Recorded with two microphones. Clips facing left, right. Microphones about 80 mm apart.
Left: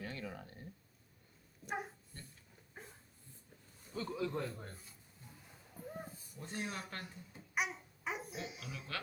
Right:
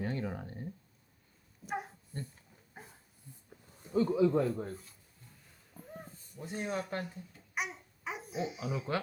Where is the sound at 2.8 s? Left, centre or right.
Centre.